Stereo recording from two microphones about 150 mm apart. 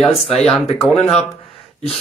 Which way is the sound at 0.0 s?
Centre (ahead or behind).